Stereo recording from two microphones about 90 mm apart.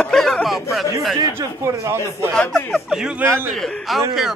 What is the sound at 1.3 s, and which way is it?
Speech, 30° right (ahead or behind).